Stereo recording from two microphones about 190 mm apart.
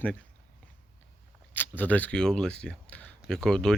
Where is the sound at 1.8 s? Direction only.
10° left (ahead or behind).